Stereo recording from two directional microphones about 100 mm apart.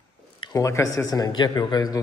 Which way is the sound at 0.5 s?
35° left (ahead or behind).